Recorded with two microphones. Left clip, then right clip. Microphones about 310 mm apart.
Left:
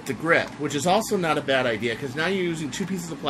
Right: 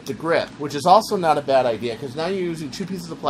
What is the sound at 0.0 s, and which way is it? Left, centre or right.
Speech, centre.